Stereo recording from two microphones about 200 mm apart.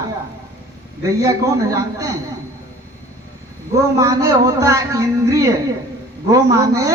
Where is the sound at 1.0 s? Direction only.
15° right (ahead or behind).